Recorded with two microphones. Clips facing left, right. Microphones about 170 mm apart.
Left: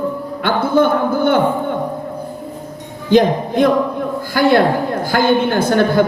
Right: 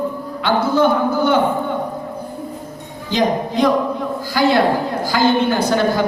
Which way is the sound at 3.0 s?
55° left (ahead or behind).